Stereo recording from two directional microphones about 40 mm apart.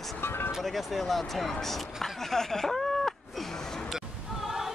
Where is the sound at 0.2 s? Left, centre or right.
Left.